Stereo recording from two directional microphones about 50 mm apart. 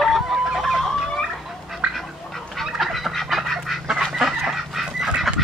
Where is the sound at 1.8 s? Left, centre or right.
Right.